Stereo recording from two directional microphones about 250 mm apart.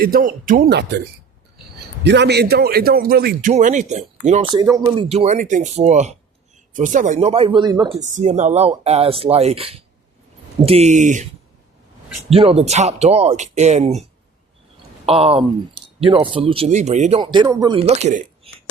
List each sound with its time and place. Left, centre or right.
0.0 s speech: right
2.0 s speech: right
4.5 s speech: centre
5.0 s speech: right
7.9 s speech: right
12.3 s speech: right
15.0 s speech: right